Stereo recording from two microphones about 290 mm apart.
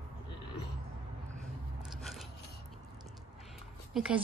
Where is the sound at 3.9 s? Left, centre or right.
Centre.